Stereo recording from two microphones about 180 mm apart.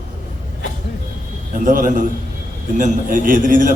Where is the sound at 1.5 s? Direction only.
50° right (ahead or behind).